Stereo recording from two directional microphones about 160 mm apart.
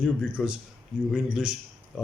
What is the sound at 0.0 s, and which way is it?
Speech, 5° right (ahead or behind).